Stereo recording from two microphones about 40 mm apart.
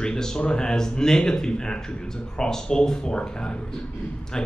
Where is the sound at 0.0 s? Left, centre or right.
Centre.